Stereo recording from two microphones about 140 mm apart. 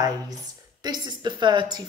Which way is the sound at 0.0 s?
30° right (ahead or behind).